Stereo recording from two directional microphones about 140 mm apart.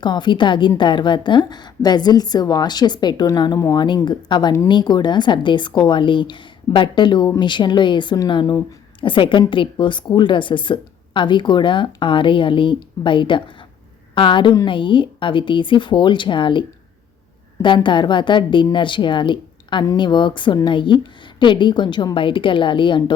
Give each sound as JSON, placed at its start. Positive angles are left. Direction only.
{"t": 0.0, "sound": "a woman's voice", "side_deg": 35}
{"t": 17.8, "sound": "a woman's voice", "side_deg": 35}